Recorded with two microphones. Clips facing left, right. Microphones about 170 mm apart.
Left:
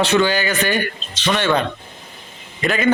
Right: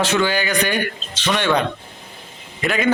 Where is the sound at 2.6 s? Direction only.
10° right (ahead or behind).